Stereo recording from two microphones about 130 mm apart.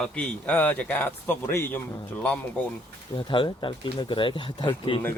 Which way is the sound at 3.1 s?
40° left (ahead or behind).